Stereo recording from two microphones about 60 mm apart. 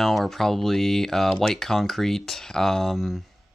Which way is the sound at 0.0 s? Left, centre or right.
Centre.